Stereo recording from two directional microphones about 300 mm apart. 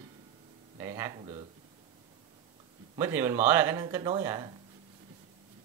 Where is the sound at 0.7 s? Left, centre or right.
Centre.